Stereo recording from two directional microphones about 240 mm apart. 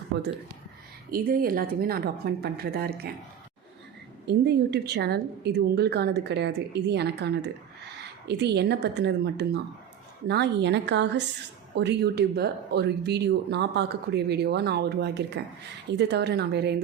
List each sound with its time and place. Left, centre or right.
0.1 s a woman's voice: right
4.3 s speech: right